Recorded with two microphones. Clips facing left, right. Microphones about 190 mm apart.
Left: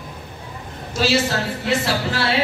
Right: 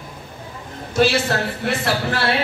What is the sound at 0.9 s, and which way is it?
Speech, 55° right (ahead or behind).